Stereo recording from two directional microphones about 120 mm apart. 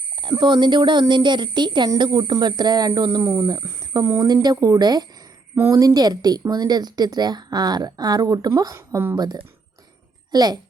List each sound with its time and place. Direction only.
0.2 s speech: 40° right (ahead or behind)
5.5 s speech: 25° right (ahead or behind)
9.1 s speech: 35° right (ahead or behind)